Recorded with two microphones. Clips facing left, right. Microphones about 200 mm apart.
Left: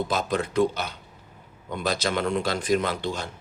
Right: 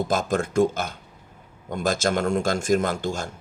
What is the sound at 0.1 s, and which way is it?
Speech, 50° right (ahead or behind).